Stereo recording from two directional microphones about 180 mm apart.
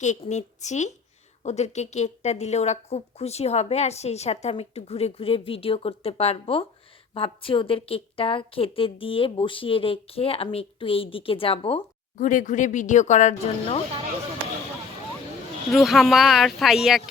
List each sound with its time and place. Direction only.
0.0 s a woman's voice: 40° left (ahead or behind)
12.1 s speech: 45° left (ahead or behind)
15.7 s speech: centre (ahead or behind)